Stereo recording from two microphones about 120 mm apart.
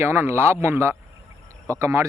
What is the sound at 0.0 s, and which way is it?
Speech, 20° right (ahead or behind).